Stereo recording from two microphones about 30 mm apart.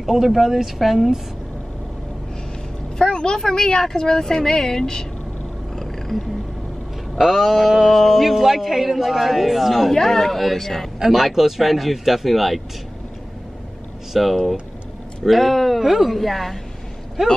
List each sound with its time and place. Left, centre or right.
0.0 s a man's voice: centre
3.0 s a sound: left
3.4 s speech: left
5.8 s cat: centre
7.2 s speech: centre
7.9 s a man's voice: centre
9.9 s speech: centre
11.1 s a man's voice: centre
14.1 s a man's voice: centre